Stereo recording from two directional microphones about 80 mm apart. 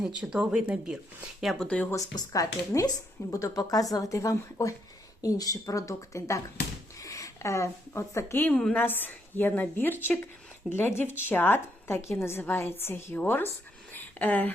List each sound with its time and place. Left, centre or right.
0.2 s speech: centre
1.4 s speech: centre
1.6 s speech: centre
2.0 s speech: left
8.4 s a woman's voice: centre
13.9 s a sound: left